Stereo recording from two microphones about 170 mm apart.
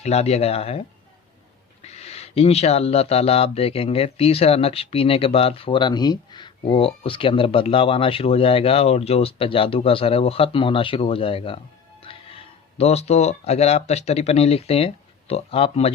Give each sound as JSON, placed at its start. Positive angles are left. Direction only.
{"t": 0.0, "sound": "speech", "side_deg": 40}